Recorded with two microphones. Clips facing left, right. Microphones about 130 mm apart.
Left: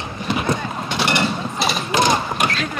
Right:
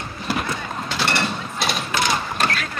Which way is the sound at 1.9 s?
20° left (ahead or behind).